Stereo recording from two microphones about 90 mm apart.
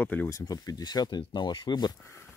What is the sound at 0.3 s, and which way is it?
Speech, 45° left (ahead or behind).